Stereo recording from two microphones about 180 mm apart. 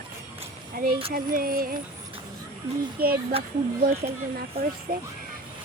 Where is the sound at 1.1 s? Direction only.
55° right (ahead or behind).